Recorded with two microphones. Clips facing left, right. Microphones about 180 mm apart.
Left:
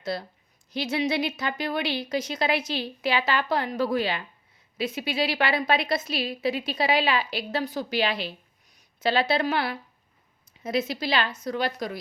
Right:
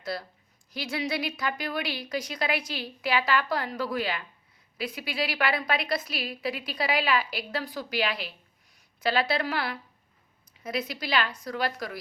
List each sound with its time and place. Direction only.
0.0 s a woman's voice: 25° left (ahead or behind)